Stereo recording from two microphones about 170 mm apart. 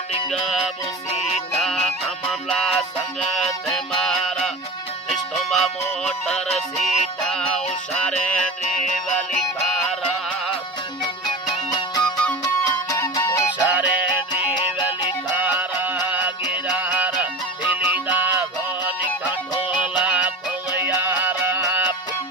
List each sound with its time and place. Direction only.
0.3 s music: centre (ahead or behind)
11.2 s music: 25° left (ahead or behind)
13.5 s music: 10° right (ahead or behind)
15.3 s music: 10° right (ahead or behind)